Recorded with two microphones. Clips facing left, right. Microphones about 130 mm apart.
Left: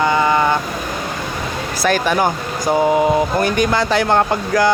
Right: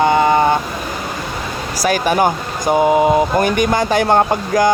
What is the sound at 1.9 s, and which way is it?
Speech, 15° right (ahead or behind).